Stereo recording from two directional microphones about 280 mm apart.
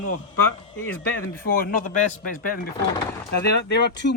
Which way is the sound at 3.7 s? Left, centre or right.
Left.